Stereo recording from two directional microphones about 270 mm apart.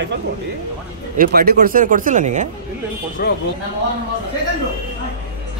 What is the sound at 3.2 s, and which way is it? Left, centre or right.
Speech, left.